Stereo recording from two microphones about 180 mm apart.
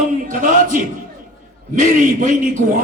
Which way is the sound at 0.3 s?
45° right (ahead or behind).